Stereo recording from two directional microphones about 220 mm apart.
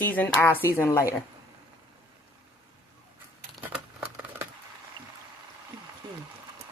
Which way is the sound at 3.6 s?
10° right (ahead or behind).